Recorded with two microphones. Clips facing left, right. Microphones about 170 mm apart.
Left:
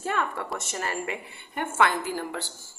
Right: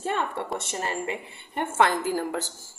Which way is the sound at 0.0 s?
25° right (ahead or behind).